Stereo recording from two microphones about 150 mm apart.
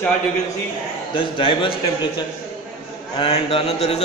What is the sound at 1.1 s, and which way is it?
Speech, 35° left (ahead or behind).